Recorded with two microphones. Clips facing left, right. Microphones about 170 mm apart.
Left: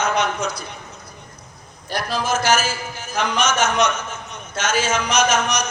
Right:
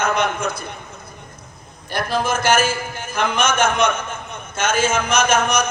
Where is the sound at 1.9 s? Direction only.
55° right (ahead or behind).